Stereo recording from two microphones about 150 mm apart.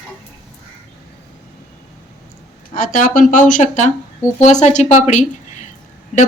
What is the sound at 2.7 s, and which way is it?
A woman's voice, 60° left (ahead or behind).